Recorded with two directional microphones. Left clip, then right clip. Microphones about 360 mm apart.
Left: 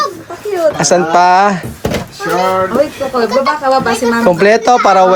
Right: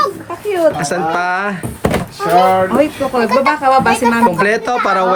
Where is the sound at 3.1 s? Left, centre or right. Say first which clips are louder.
Left 1 dB; right.